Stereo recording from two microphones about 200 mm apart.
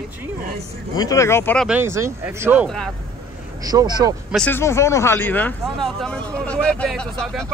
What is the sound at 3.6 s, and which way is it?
Speech, 20° right (ahead or behind).